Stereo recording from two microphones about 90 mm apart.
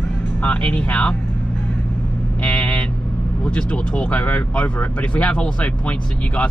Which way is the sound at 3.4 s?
10° left (ahead or behind).